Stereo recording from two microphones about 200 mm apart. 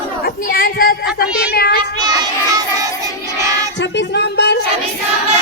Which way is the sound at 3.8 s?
60° left (ahead or behind).